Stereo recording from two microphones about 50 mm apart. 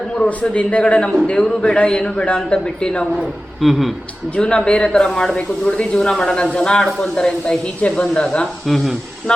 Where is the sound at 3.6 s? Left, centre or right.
Centre.